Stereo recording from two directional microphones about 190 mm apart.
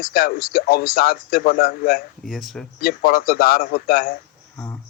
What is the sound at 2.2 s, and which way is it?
Speech, centre (ahead or behind).